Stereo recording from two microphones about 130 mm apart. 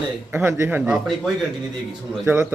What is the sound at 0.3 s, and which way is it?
Speech, 15° right (ahead or behind).